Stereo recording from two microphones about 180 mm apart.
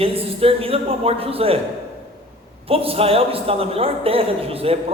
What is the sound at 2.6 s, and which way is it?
A man's voice, 30° right (ahead or behind).